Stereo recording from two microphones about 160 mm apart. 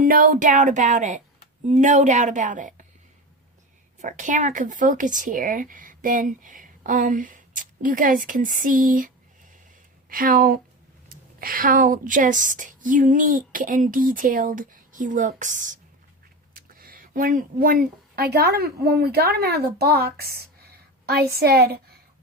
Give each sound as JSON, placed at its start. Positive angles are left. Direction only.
{"t": 0.0, "sound": "speech", "side_deg": -60}
{"t": 4.0, "sound": "speech", "side_deg": -50}
{"t": 16.6, "sound": "speech", "side_deg": -65}